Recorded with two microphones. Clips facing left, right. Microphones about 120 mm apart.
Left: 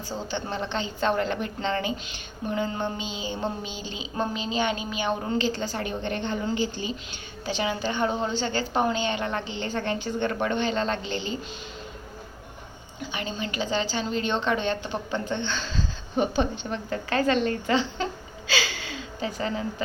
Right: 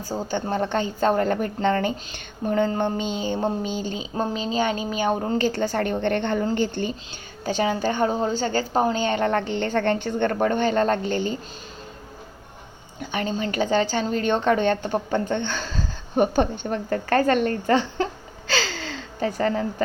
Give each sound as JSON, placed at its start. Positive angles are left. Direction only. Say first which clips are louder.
{"t": 0.3, "sound": "a woman's voice", "louder": "right 7 dB", "side_deg": -45}
{"t": 5.5, "sound": "a woman's voice", "louder": "right 6 dB", "side_deg": -55}
{"t": 7.4, "sound": "a woman's voice", "louder": "right 5 dB", "side_deg": -45}
{"t": 10.3, "sound": "a woman's voice", "louder": "right 7 dB", "side_deg": -45}
{"t": 13.0, "sound": "a woman's voice", "louder": "right 6 dB", "side_deg": -50}
{"t": 18.4, "sound": "gasp", "louder": "right 3 dB", "side_deg": -50}